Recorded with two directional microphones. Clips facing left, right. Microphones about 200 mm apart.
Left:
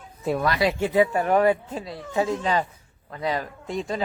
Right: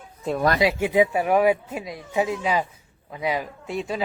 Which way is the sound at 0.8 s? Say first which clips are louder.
Right 1 dB; 15° right (ahead or behind).